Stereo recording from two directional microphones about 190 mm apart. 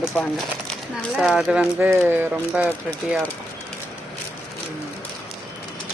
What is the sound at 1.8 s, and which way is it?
Speech, 10° right (ahead or behind).